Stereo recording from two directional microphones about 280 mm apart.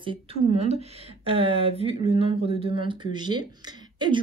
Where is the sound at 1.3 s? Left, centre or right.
Centre.